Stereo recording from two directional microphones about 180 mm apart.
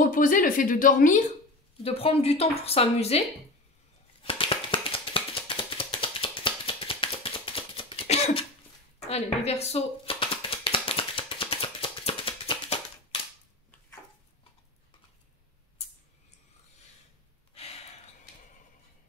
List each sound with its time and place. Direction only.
0.0 s a woman's voice: 50° left (ahead or behind)
1.8 s a woman's voice: 30° left (ahead or behind)
4.2 s a sound: 30° left (ahead or behind)